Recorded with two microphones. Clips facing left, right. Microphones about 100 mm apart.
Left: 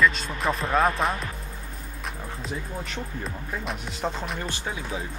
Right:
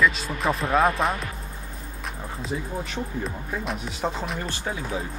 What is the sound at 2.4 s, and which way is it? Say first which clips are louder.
Speech: right 4 dB; centre (ahead or behind).